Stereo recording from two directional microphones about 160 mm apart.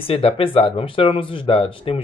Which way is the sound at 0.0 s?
35° left (ahead or behind).